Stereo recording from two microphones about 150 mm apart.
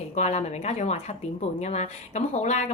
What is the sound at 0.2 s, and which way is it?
Speech, 50° left (ahead or behind).